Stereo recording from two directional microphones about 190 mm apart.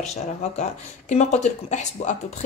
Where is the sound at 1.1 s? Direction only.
35° left (ahead or behind).